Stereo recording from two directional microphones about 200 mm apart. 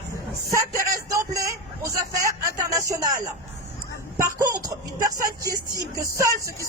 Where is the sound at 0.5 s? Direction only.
15° right (ahead or behind).